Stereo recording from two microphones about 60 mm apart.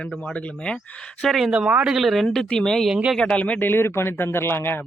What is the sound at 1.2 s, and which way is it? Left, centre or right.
Speech, centre.